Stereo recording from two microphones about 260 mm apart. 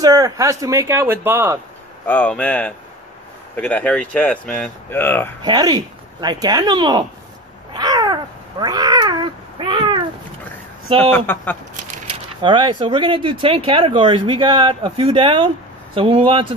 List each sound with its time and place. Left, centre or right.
0.0 s speech: centre
2.0 s speech: centre
5.4 s speech: centre
7.7 s crow: centre
11.0 s speech: centre
11.7 s speech: right